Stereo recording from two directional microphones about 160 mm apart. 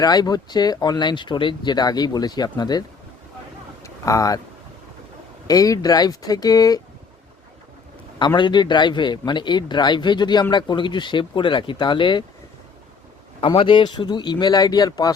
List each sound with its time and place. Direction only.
0.0 s speech: 25° left (ahead or behind)
3.8 s speech: 20° left (ahead or behind)
5.5 s speech: 20° left (ahead or behind)
8.4 s speech: 30° left (ahead or behind)
13.4 s speech: 35° left (ahead or behind)